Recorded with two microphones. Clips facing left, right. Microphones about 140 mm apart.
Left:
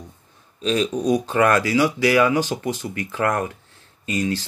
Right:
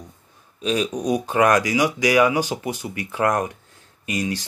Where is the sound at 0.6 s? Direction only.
10° right (ahead or behind).